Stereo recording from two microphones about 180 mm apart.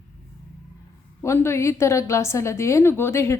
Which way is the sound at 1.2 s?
15° left (ahead or behind).